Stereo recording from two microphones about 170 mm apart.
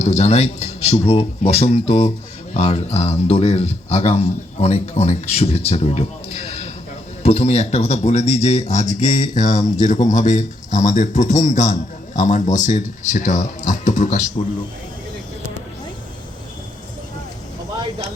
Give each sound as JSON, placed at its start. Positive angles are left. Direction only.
{"t": 0.0, "sound": "a man's voice", "side_deg": 40}